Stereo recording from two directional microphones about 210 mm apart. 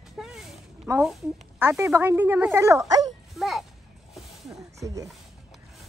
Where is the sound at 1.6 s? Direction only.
10° right (ahead or behind).